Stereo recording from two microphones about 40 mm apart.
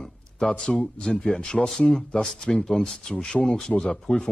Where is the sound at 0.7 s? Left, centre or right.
Left.